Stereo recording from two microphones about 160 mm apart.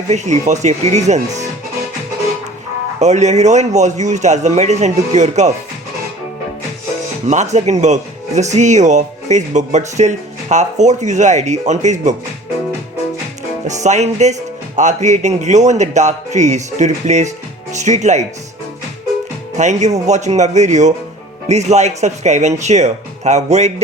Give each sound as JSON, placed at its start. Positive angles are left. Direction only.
{"t": 0.1, "sound": "speech", "side_deg": -45}
{"t": 3.0, "sound": "speech", "side_deg": -45}
{"t": 7.3, "sound": "speech", "side_deg": -45}
{"t": 13.7, "sound": "speech", "side_deg": -45}
{"t": 19.5, "sound": "speech", "side_deg": -45}